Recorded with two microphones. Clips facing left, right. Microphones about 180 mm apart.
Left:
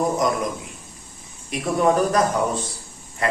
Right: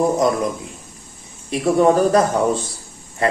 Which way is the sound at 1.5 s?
35° right (ahead or behind).